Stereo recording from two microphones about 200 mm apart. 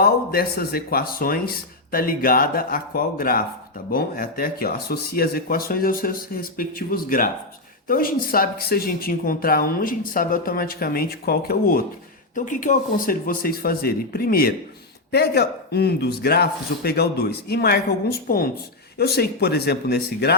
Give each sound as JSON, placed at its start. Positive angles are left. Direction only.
{"t": 0.0, "sound": "speech", "side_deg": 50}